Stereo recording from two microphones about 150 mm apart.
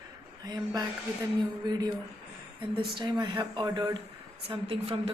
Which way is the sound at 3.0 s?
30° right (ahead or behind).